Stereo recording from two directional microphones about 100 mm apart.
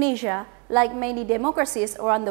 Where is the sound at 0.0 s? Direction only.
15° right (ahead or behind).